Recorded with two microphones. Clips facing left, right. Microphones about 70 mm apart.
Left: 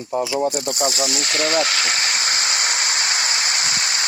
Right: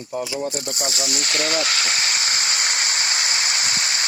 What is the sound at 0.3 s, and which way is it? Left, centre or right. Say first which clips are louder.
Speech: left 6 dB; left.